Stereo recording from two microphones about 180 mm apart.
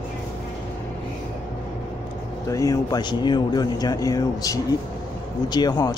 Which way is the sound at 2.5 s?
20° left (ahead or behind).